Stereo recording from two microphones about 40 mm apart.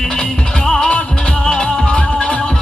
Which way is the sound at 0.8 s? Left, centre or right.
Left.